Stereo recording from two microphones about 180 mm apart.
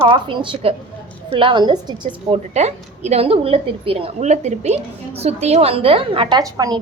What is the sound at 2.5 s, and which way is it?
A woman's voice, 35° right (ahead or behind).